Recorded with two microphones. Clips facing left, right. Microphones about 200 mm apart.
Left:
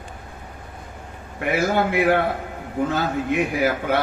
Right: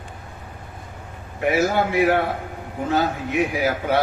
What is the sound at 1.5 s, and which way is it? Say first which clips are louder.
A man's voice: even; 50° left (ahead or behind).